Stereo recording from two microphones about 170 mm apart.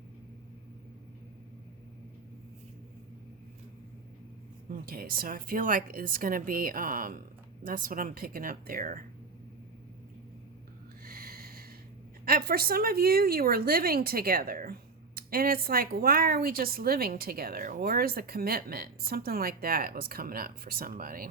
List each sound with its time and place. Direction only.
4.9 s a woman's voice: 60° right (ahead or behind)
11.0 s snort: 60° right (ahead or behind)
12.2 s a woman's voice: 60° right (ahead or behind)